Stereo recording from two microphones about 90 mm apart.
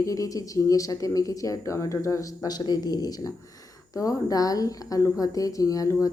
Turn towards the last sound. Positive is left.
turn(degrees=40)  # may be behind; listen again after turning